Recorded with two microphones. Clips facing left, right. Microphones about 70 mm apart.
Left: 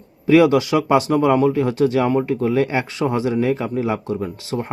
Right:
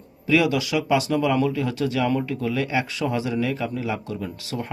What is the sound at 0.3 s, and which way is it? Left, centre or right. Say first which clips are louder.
Speech: left 7 dB; left.